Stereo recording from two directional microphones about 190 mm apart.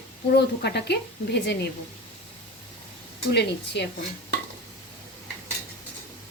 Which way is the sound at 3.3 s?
65° left (ahead or behind).